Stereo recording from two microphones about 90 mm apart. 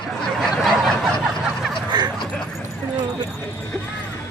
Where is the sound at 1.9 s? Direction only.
55° right (ahead or behind).